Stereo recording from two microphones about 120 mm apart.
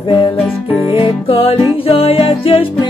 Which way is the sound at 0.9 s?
50° left (ahead or behind).